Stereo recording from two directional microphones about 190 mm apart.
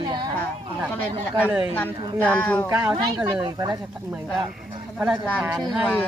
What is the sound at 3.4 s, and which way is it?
Speech, 20° right (ahead or behind).